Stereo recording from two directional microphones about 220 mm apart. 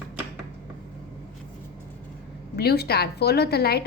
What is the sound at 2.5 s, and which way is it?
A woman's voice, 45° left (ahead or behind).